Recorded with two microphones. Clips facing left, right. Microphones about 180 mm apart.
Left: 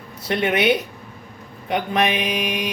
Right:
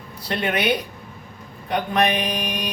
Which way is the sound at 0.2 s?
25° left (ahead or behind).